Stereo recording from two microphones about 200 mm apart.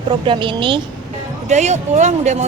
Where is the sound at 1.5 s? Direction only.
35° right (ahead or behind).